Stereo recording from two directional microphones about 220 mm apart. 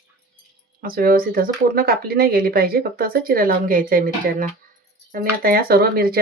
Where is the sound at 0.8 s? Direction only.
40° right (ahead or behind).